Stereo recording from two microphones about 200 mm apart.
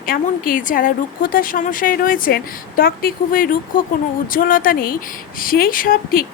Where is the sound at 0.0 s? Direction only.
45° left (ahead or behind).